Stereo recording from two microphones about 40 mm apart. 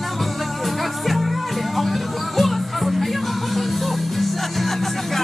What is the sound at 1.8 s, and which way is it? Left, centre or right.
Music, centre.